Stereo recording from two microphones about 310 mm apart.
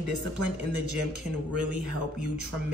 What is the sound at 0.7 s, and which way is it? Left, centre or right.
Speech, left.